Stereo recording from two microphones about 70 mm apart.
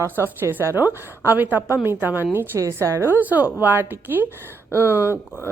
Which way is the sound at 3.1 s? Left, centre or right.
Right.